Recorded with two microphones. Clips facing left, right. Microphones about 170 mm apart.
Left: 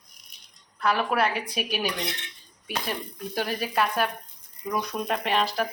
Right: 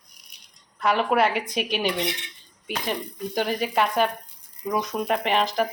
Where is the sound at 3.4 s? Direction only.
20° right (ahead or behind).